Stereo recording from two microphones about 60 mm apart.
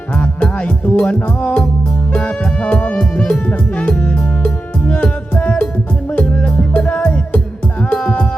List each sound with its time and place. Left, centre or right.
0.9 s music: left
4.4 s music: centre